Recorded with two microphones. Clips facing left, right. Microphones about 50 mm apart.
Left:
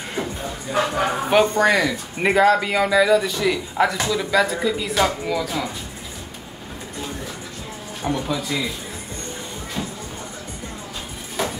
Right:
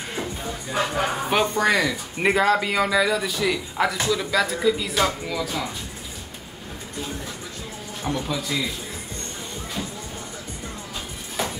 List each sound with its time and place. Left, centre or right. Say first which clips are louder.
0.1 s speech: left 3 dB; centre
8.0 s speech: left 3 dB; centre